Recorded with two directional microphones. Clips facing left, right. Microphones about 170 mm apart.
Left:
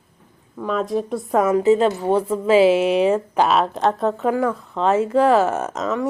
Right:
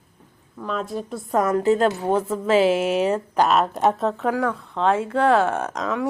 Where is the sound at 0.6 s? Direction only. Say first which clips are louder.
Left 5 dB; 5° left (ahead or behind).